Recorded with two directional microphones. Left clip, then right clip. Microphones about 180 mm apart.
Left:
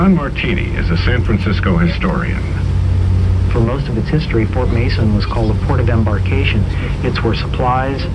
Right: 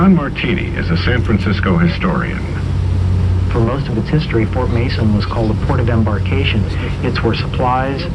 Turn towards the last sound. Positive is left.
turn(degrees=-10)  # may be behind; listen again after turning